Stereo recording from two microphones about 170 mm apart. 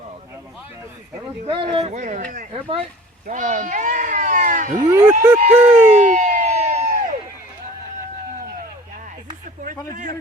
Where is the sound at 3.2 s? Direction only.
45° right (ahead or behind).